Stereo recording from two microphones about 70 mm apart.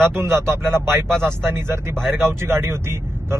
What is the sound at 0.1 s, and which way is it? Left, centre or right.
Speech, right.